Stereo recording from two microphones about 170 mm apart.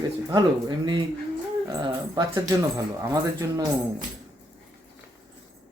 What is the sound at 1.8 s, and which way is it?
Speech, 25° right (ahead or behind).